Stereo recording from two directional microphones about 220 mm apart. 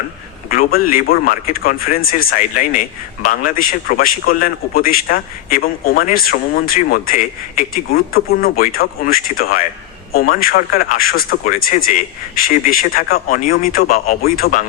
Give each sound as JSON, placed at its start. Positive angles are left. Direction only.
{"t": 0.5, "sound": "a man's voice", "side_deg": 40}